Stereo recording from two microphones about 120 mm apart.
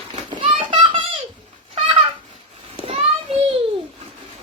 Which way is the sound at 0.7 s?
40° right (ahead or behind).